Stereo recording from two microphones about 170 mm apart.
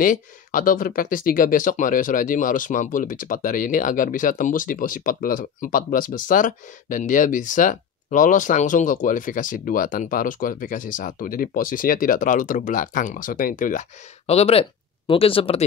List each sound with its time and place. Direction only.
0.0 s speech: 50° left (ahead or behind); by 15.6 s 35° left (ahead or behind)